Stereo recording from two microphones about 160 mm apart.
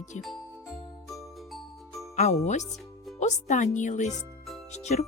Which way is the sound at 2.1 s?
45° left (ahead or behind).